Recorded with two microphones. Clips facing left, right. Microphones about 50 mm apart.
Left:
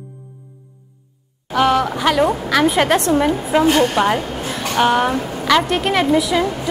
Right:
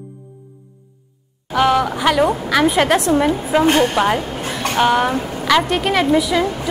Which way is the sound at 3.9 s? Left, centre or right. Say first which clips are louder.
Even; centre.